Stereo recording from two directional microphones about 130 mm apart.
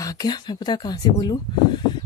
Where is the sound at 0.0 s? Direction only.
30° left (ahead or behind).